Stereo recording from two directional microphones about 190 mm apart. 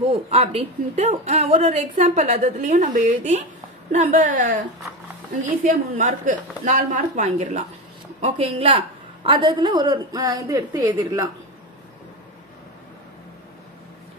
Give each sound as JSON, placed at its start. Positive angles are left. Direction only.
{"t": 0.1, "sound": "a woman's voice", "side_deg": -30}